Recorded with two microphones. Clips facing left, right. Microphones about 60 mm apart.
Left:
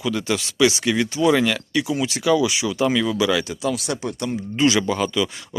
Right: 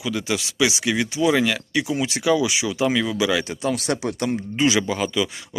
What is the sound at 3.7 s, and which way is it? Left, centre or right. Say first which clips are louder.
Speech: right 2 dB; right.